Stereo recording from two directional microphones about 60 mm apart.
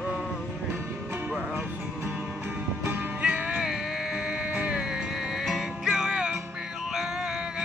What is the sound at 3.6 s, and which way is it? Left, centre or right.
Music, centre.